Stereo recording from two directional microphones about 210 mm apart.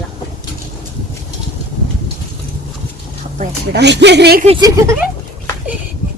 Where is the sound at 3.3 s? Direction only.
50° right (ahead or behind).